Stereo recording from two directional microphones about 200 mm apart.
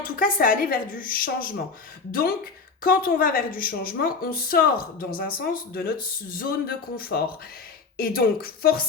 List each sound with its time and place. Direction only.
0.0 s a woman's voice: 45° left (ahead or behind)
2.8 s a woman's voice: 45° left (ahead or behind)